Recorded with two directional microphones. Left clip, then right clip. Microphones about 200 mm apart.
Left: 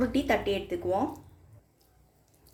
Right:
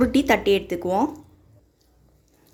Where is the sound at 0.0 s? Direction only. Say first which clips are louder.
Right 8 dB; 50° right (ahead or behind).